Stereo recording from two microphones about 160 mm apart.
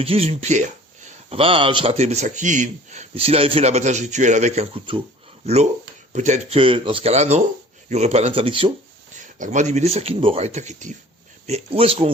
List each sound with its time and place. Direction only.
0.0 s speech: 40° right (ahead or behind)
1.3 s speech: 35° right (ahead or behind)
6.1 s speech: 45° right (ahead or behind)
9.1 s speech: 50° right (ahead or behind)